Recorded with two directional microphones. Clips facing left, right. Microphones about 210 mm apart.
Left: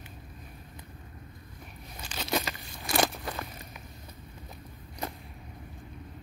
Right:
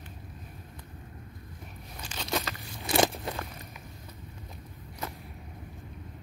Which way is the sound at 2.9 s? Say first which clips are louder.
Right 3 dB; 25° right (ahead or behind).